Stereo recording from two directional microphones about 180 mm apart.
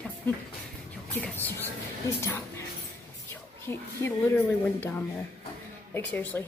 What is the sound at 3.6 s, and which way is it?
A woman's voice, 10° left (ahead or behind).